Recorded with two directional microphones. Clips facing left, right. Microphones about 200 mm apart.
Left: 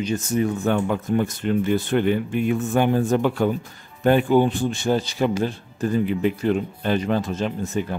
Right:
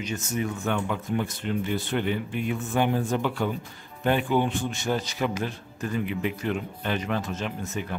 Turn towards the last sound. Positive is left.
turn(degrees=30)  # may be behind; listen again after turning